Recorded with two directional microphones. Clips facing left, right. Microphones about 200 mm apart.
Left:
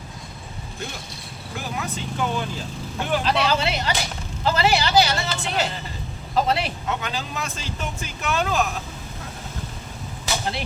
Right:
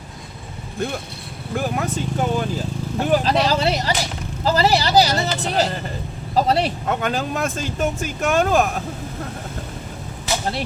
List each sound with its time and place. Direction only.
0.8 s speech: 55° right (ahead or behind); by 6.7 s 35° right (ahead or behind)
6.8 s speech: 50° right (ahead or behind)